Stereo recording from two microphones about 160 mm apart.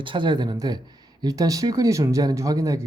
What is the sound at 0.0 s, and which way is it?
Speech, 30° right (ahead or behind).